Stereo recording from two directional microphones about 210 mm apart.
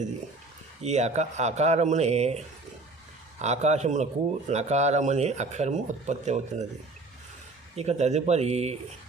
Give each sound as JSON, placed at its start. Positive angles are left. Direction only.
{"t": 0.8, "sound": "speech", "side_deg": -30}
{"t": 7.8, "sound": "speech", "side_deg": -30}